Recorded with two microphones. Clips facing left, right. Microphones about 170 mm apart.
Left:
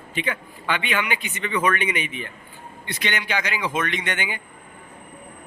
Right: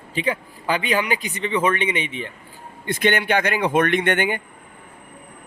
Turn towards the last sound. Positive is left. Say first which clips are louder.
# right 8 dB
turn(degrees=-55)  # may be behind; listen again after turning